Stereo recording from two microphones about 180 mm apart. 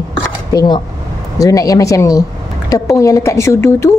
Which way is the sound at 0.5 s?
20° left (ahead or behind).